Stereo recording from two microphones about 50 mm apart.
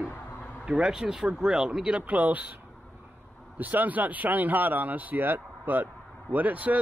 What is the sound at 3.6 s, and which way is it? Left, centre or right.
Speech, right.